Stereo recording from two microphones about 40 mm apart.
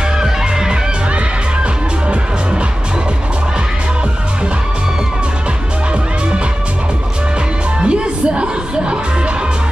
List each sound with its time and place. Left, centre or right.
0.2 s music: centre
1.1 s music: right
7.8 s music: right